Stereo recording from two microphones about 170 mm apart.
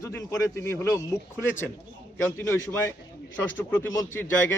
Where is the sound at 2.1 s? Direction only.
15° left (ahead or behind).